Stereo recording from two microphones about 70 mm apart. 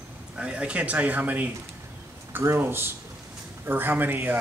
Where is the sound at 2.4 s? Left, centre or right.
Right.